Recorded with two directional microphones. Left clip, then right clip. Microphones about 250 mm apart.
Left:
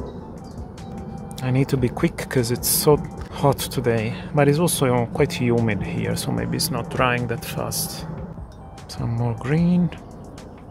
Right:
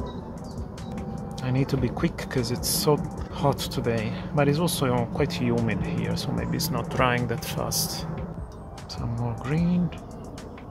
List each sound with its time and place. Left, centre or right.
1.4 s speech: left
9.4 s speech: left